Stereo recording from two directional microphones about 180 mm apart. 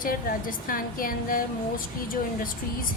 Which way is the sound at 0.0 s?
50° left (ahead or behind).